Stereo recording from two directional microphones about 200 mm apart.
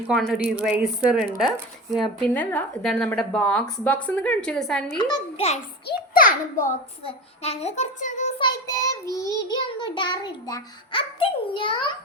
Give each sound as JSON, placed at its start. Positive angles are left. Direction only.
{"t": 0.1, "sound": "speech", "side_deg": 0}
{"t": 4.9, "sound": "a child's voice", "side_deg": 20}
{"t": 5.8, "sound": "a child's voice", "side_deg": 45}
{"t": 7.0, "sound": "a child's voice", "side_deg": 30}
{"t": 8.4, "sound": "child singing", "side_deg": 20}
{"t": 9.5, "sound": "a child's voice", "side_deg": 25}